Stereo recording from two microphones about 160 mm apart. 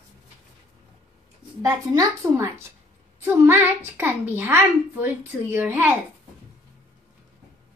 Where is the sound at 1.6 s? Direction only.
25° right (ahead or behind).